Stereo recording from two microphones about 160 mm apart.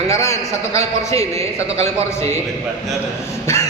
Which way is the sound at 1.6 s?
40° right (ahead or behind).